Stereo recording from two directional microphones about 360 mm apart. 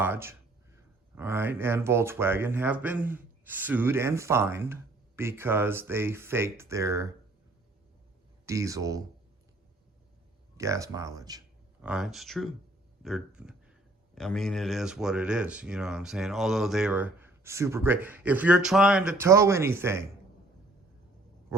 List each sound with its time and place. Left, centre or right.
0.0 s speech: centre
8.4 s speech: centre
10.6 s speech: centre
13.0 s a sound: centre
14.2 s speech: centre